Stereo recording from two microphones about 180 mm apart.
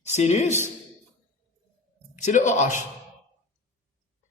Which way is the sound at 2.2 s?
40° left (ahead or behind).